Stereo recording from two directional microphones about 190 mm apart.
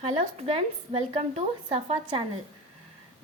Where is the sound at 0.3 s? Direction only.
30° right (ahead or behind).